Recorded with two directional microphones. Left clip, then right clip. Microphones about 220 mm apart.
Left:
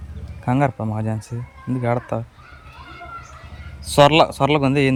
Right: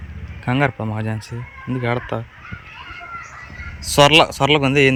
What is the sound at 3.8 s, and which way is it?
Speech, 15° left (ahead or behind).